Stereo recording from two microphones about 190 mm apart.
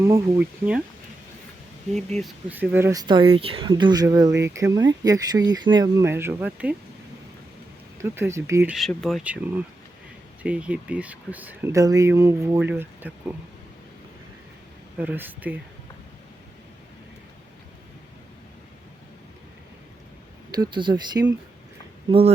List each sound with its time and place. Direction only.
0.0 s speech: 15° right (ahead or behind)
1.9 s speech: centre (ahead or behind)
2.5 s speech: 10° right (ahead or behind)
7.9 s speech: 15° right (ahead or behind)
8.7 s speech: centre (ahead or behind)
10.4 s speech: 5° right (ahead or behind)
14.9 s speech: 10° right (ahead or behind)
20.5 s speech: 25° right (ahead or behind)